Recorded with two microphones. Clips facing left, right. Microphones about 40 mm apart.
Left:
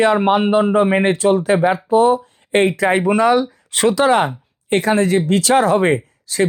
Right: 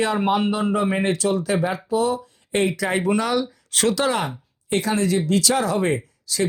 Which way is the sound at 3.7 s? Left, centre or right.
Centre.